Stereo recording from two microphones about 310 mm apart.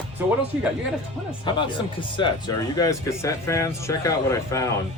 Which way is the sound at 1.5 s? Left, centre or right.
Centre.